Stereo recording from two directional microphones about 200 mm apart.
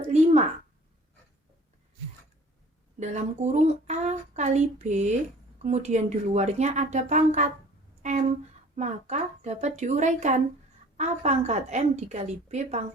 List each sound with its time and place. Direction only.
0.0 s a sound: 35° right (ahead or behind)
3.0 s speech: 35° right (ahead or behind)
8.7 s speech: 35° right (ahead or behind)